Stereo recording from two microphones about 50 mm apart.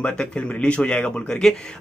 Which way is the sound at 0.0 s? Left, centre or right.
Left.